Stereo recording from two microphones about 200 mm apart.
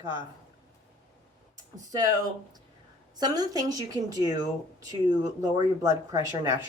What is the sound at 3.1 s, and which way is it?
A woman's voice, 20° right (ahead or behind).